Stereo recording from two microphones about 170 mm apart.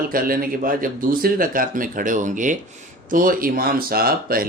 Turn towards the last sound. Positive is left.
turn(degrees=-60)  # may be behind; listen again after turning